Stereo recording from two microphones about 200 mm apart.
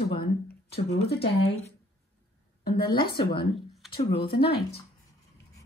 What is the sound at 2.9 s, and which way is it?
Speech, 25° left (ahead or behind).